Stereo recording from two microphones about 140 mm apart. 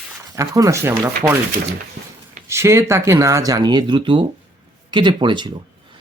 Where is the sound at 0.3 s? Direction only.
25° right (ahead or behind).